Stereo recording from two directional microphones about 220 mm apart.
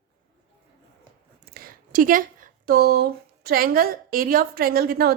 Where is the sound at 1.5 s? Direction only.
45° right (ahead or behind).